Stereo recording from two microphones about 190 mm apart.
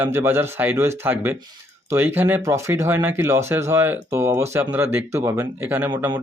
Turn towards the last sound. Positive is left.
turn(degrees=-10)  # may be behind; listen again after turning